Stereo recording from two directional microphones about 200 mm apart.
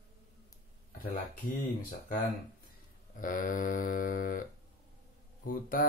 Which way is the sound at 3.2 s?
45° left (ahead or behind).